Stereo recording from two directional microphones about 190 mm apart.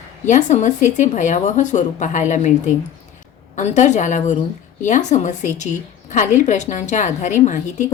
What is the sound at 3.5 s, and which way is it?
A woman's voice, 40° left (ahead or behind).